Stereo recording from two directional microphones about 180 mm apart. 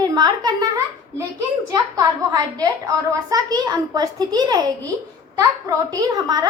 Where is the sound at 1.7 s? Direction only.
20° right (ahead or behind).